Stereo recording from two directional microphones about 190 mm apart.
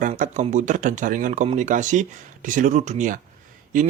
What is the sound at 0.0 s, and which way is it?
Speech, 45° right (ahead or behind).